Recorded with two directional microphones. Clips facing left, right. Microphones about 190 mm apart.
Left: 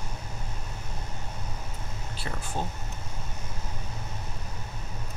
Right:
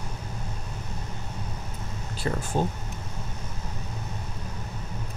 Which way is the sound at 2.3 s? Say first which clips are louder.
Right 9 dB; 50° right (ahead or behind).